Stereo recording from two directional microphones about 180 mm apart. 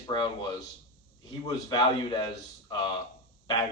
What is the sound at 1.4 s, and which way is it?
Speech, 25° left (ahead or behind).